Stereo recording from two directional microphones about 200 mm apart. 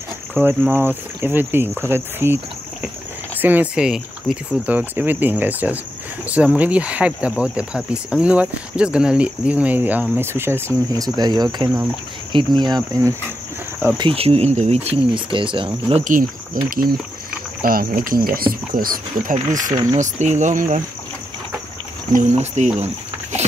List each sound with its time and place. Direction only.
0.4 s speech: 10° right (ahead or behind); by 16.0 s 25° right (ahead or behind)
16.0 s speech: 40° right (ahead or behind)
19.7 s speech: 20° right (ahead or behind)
20.0 s speech: 35° right (ahead or behind)
22.1 s speech: 35° right (ahead or behind)